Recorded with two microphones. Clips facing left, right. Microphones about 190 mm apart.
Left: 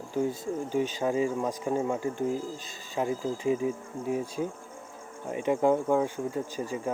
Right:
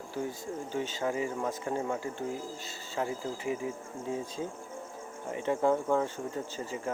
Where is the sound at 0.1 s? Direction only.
15° left (ahead or behind).